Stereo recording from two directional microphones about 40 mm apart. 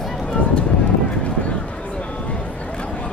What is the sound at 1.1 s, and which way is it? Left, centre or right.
Clip-clop, left.